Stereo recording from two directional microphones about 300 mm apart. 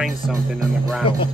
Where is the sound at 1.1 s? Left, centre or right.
Centre.